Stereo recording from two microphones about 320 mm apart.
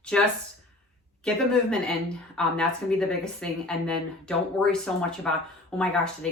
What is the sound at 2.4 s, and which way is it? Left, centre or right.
Speech, centre.